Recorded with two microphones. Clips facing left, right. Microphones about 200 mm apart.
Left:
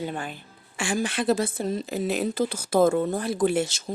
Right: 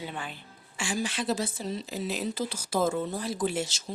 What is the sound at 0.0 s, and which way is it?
A woman's voice, 45° left (ahead or behind).